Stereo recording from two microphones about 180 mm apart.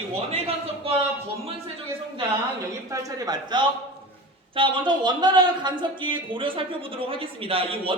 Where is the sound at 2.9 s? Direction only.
20° right (ahead or behind).